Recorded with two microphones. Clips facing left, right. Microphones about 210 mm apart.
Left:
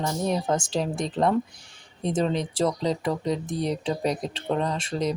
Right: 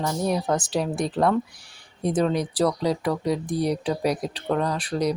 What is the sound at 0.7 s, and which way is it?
Speech, 5° right (ahead or behind).